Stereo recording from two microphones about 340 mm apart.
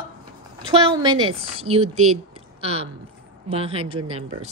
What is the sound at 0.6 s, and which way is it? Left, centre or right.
Speech, centre.